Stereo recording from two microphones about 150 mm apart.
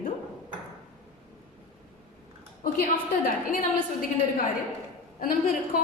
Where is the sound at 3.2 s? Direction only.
70° left (ahead or behind).